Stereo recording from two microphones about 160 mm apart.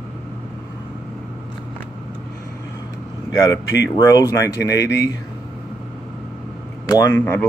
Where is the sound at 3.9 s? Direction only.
20° left (ahead or behind).